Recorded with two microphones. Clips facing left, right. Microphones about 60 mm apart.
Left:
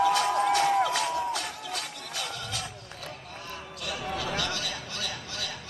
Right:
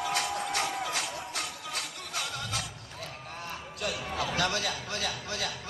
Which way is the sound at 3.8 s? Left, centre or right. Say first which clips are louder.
Even; right.